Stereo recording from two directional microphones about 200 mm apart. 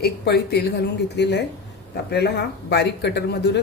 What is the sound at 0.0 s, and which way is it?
A woman's voice, 55° left (ahead or behind).